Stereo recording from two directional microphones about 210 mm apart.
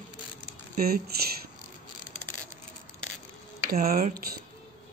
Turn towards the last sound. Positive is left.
turn(degrees=-45)  # may be behind; listen again after turning